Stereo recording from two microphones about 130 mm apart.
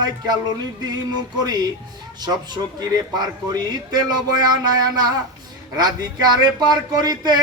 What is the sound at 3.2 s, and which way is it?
Speech, 30° right (ahead or behind).